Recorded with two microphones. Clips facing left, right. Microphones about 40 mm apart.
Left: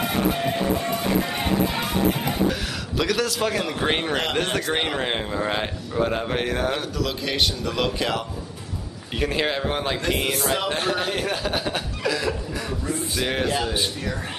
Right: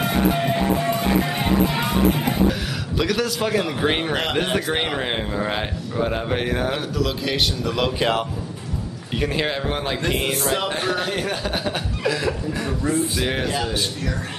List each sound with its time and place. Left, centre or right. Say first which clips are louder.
0.0 s music: right 2 dB; centre
3.0 s speech: right 1 dB; centre
9.2 s speech: even; centre